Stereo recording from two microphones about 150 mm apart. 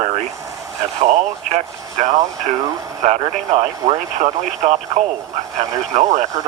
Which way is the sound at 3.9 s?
50° right (ahead or behind).